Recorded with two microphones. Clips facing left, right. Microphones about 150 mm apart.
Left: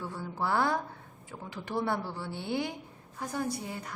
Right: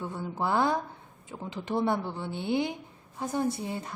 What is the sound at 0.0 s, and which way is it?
Speech, 20° right (ahead or behind).